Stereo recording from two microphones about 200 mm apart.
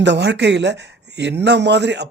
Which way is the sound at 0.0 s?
60° right (ahead or behind).